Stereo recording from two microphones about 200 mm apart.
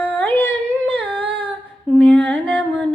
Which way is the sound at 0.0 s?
10° left (ahead or behind).